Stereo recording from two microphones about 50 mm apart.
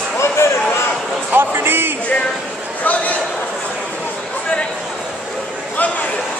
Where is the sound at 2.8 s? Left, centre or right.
Left.